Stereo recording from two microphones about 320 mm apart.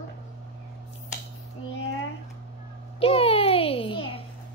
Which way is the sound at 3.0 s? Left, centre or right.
Centre.